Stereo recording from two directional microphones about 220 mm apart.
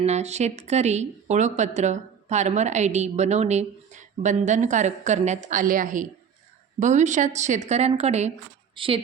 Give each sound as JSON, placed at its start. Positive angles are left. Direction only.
{"t": 0.0, "sound": "a woman's voice", "side_deg": -30}